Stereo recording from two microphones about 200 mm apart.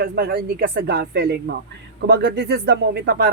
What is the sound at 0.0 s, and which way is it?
Speech, 50° right (ahead or behind).